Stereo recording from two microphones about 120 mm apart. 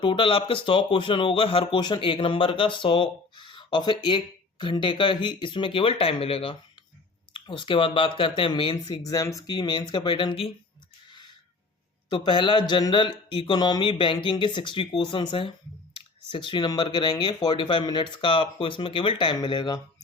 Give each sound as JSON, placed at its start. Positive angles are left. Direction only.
{"t": 0.0, "sound": "speech", "side_deg": 45}
{"t": 12.0, "sound": "speech", "side_deg": 40}